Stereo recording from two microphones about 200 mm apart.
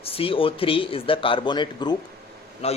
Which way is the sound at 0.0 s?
30° left (ahead or behind).